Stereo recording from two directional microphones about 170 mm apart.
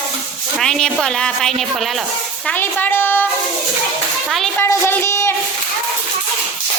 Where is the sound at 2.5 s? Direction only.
10° left (ahead or behind).